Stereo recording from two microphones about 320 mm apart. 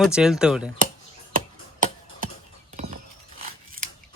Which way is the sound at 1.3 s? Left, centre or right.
Right.